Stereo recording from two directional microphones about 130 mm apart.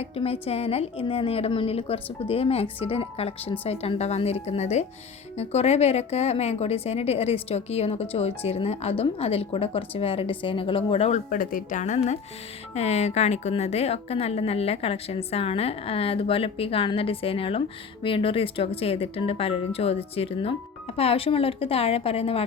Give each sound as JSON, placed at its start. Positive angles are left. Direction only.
{"t": 0.0, "sound": "a woman's voice", "side_deg": 50}
{"t": 11.3, "sound": "a woman's voice", "side_deg": 90}